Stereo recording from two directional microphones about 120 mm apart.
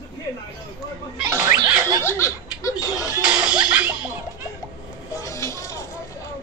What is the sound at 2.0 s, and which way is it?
Speech, 25° left (ahead or behind).